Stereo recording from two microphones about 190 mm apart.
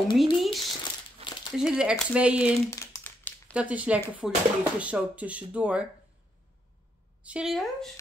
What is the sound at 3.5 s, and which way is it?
Speech, 5° right (ahead or behind).